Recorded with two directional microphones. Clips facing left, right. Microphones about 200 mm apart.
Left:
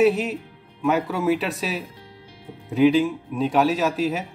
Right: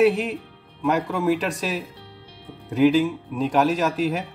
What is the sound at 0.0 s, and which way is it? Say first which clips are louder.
A man's voice: even; centre (ahead or behind).